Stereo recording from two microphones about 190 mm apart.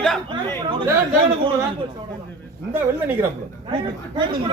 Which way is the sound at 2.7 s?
10° right (ahead or behind).